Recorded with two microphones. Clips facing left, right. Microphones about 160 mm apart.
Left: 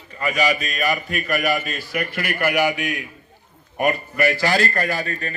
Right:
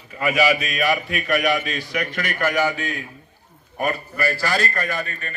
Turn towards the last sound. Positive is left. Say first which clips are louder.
# left 3 dB
turn(degrees=35)  # may be behind; listen again after turning